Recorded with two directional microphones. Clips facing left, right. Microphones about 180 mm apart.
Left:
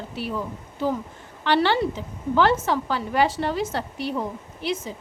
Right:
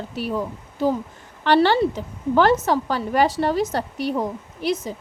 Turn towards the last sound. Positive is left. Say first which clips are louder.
# right 4 dB
turn(degrees=-40)  # may be behind; listen again after turning